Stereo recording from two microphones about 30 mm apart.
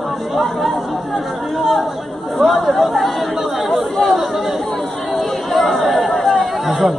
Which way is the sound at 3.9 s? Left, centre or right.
Centre.